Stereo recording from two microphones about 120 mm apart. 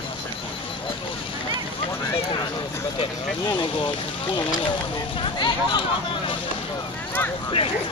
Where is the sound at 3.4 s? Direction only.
40° left (ahead or behind).